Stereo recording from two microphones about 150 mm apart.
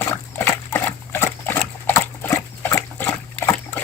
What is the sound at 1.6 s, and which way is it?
Pig, 15° left (ahead or behind).